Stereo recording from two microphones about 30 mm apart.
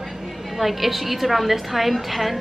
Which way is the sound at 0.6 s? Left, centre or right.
Centre.